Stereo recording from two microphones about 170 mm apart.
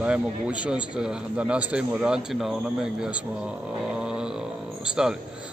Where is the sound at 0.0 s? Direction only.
5° right (ahead or behind).